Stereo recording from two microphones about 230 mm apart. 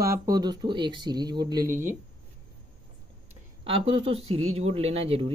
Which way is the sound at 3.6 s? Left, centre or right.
Right.